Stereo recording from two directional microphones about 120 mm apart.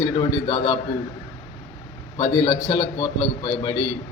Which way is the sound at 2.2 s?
40° left (ahead or behind).